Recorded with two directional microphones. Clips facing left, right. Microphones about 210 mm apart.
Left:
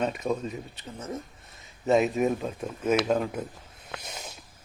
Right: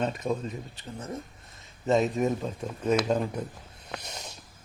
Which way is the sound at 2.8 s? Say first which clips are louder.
Left 1 dB; 5° left (ahead or behind).